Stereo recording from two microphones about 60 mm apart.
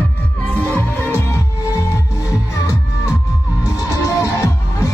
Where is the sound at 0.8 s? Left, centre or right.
Left.